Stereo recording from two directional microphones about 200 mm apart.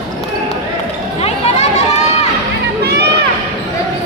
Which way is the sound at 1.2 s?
35° left (ahead or behind).